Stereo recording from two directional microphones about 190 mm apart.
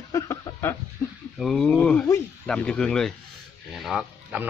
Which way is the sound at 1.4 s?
Centre (ahead or behind).